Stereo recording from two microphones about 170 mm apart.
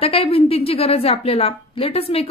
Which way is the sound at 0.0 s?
35° left (ahead or behind).